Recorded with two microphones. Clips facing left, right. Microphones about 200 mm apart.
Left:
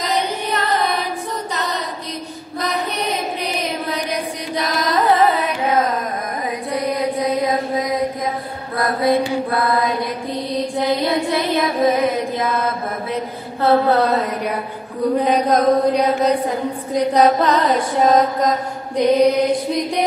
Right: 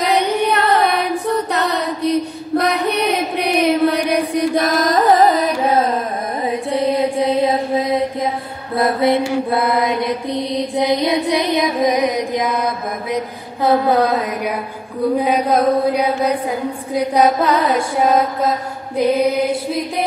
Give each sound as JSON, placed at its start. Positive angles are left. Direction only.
{"t": 0.0, "sound": "music", "side_deg": -60}
{"t": 4.1, "sound": "carnatic music", "side_deg": -50}
{"t": 6.4, "sound": "mantra", "side_deg": -25}